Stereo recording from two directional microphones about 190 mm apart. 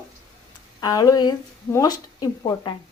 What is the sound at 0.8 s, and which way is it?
Speech, 20° left (ahead or behind).